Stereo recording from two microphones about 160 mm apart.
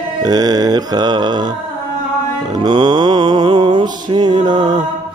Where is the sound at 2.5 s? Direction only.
30° right (ahead or behind).